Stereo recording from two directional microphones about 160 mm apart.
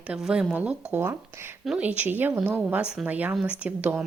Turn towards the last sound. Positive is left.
turn(degrees=-10)  # may be behind; listen again after turning